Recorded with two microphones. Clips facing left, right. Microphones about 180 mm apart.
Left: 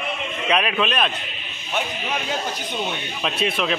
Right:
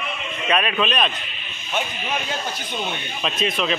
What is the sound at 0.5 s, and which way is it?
Speech, 10° left (ahead or behind).